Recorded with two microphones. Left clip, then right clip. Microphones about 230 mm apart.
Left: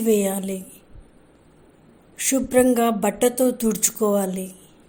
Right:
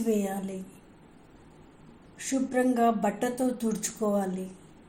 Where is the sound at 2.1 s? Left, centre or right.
Left.